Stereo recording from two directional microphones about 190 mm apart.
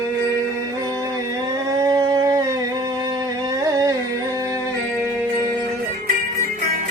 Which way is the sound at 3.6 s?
20° right (ahead or behind).